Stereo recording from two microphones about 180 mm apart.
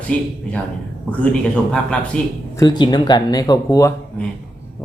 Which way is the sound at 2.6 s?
25° left (ahead or behind).